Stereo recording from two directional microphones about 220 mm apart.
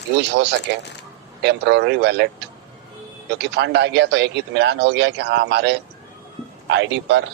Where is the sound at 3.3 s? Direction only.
50° right (ahead or behind).